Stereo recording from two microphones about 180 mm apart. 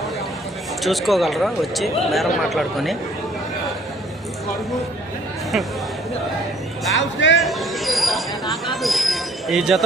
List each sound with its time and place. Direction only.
0.8 s speech: centre (ahead or behind)
6.9 s speech: 90° left
7.3 s a sound: centre (ahead or behind)